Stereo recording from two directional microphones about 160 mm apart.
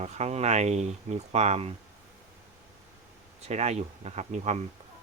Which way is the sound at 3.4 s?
45° right (ahead or behind).